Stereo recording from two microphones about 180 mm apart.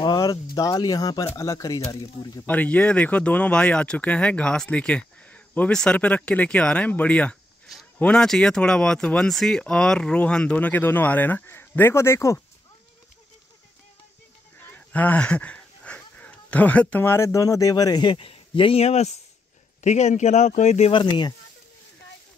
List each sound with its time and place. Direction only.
0.0 s speech: 20° left (ahead or behind)
2.4 s speech: 10° left (ahead or behind)
14.6 s speech: 10° left (ahead or behind); by 20.9 s 40° left (ahead or behind)
20.9 s speech: 25° left (ahead or behind)